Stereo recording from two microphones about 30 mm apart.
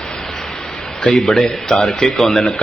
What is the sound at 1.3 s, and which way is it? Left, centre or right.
A man's voice, centre.